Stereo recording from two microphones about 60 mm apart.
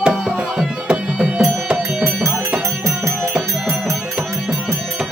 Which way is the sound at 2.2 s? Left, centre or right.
Right.